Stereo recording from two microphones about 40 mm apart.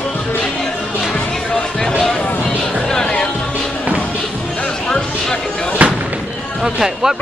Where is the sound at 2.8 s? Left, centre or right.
Centre.